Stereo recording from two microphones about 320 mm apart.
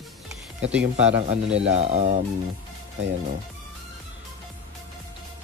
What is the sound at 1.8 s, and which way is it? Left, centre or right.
Speech, centre.